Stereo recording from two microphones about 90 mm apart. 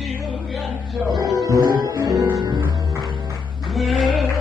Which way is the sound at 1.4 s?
40° right (ahead or behind).